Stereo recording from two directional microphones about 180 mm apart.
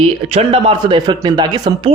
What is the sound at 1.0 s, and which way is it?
Speech, 20° right (ahead or behind).